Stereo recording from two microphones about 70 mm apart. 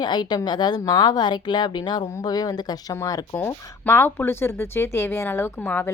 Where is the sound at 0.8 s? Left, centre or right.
Left.